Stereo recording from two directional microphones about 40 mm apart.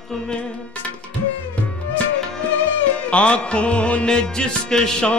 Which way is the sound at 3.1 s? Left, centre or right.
Left.